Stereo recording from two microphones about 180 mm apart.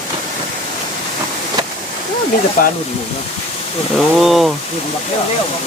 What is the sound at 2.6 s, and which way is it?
Speech, 50° left (ahead or behind).